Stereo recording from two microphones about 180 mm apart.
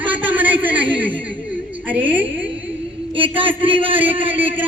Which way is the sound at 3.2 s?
30° right (ahead or behind).